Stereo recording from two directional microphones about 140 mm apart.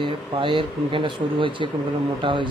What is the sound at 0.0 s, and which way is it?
Speech, 35° right (ahead or behind).